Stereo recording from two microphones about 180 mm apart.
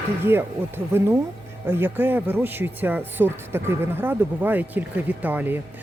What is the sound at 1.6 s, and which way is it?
Speech, 10° right (ahead or behind).